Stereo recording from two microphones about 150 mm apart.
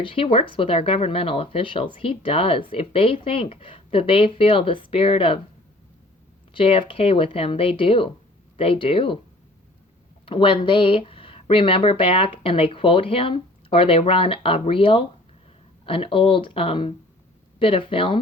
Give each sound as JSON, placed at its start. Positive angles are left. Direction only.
{"t": 0.0, "sound": "speech", "side_deg": 35}
{"t": 6.5, "sound": "speech", "side_deg": 35}
{"t": 10.2, "sound": "speech", "side_deg": 35}